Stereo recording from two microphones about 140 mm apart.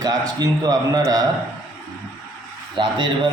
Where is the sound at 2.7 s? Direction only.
35° right (ahead or behind).